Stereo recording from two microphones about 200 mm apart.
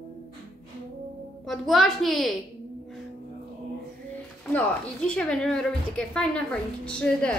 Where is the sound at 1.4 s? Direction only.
Centre (ahead or behind).